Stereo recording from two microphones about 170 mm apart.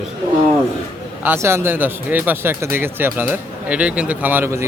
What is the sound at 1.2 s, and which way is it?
Speech, 15° right (ahead or behind).